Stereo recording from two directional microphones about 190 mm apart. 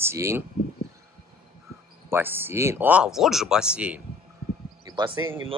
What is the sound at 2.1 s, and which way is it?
Speech, 10° right (ahead or behind).